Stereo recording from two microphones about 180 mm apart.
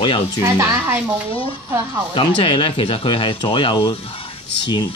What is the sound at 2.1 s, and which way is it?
Speech, 25° left (ahead or behind).